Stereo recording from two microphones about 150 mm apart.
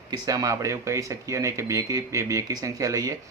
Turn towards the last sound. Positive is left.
turn(degrees=-20)  # may be behind; listen again after turning